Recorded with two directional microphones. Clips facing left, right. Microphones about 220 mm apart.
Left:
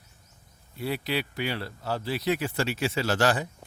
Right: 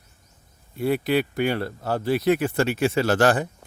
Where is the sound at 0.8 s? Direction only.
50° right (ahead or behind).